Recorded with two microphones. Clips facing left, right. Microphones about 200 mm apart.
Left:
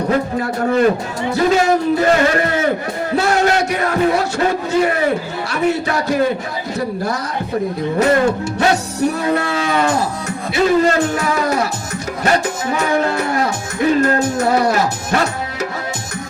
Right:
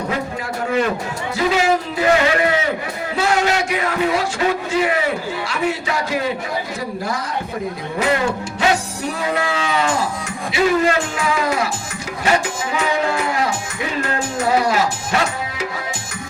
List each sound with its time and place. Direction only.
0.1 s a sound: 45° left (ahead or behind)
1.4 s a man's voice: 45° left (ahead or behind)
6.7 s livestock: 65° left (ahead or behind)
7.9 s speech: 40° left (ahead or behind)
9.4 s livestock: 55° left (ahead or behind)
10.2 s speech: 40° left (ahead or behind)
13.3 s music: 45° left (ahead or behind)
14.3 s speech: 40° left (ahead or behind)